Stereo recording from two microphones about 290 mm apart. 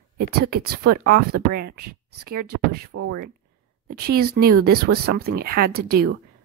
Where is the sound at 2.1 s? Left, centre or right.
Right.